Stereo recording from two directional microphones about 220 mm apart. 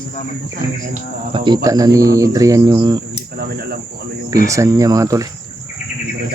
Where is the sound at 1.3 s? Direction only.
20° right (ahead or behind).